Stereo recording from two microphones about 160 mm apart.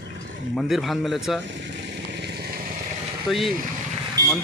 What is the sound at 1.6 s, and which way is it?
Vehicle, 90° right.